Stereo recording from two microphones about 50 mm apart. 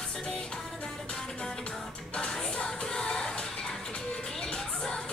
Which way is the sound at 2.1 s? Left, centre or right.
Centre.